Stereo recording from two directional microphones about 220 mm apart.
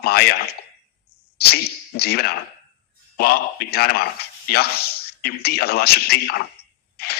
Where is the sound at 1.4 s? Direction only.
45° left (ahead or behind).